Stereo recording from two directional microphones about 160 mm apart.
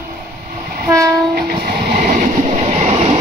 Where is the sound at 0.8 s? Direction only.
20° right (ahead or behind).